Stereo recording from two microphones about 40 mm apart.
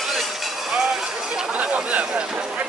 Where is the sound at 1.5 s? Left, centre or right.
Right.